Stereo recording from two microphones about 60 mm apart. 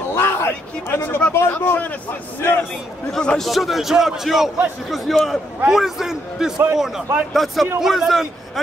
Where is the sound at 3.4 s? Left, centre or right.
Centre.